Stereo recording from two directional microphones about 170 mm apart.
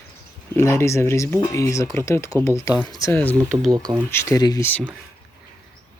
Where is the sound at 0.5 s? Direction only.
15° left (ahead or behind).